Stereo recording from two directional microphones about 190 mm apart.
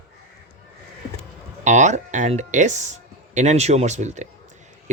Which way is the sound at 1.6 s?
40° right (ahead or behind).